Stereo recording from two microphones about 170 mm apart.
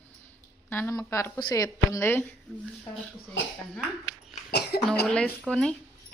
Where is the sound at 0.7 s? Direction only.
15° left (ahead or behind).